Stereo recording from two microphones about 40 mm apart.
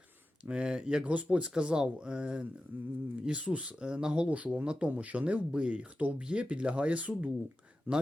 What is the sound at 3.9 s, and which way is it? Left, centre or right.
Speech, right.